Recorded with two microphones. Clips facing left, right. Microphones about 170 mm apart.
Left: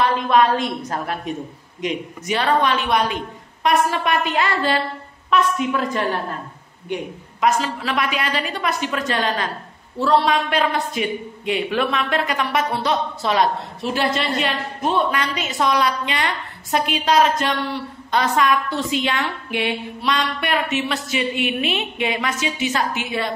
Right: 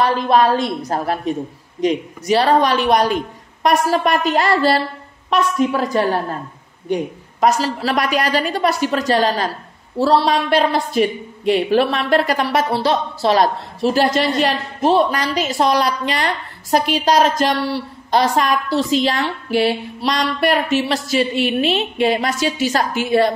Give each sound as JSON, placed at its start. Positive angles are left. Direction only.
{"t": 0.0, "sound": "a woman's voice", "side_deg": -35}